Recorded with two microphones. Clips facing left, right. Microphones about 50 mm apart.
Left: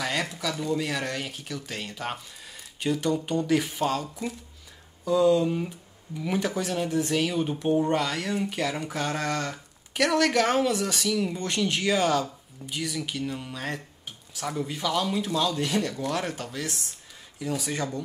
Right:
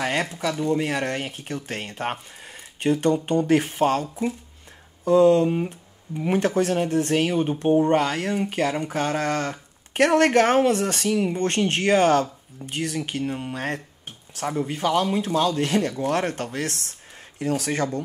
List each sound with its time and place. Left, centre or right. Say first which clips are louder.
0.0 s speech: right 4 dB; right